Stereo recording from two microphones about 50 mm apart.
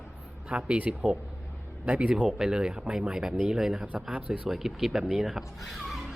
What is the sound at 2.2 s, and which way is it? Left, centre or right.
Speech, centre.